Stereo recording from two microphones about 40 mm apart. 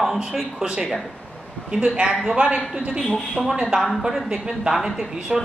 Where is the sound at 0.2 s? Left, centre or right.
Right.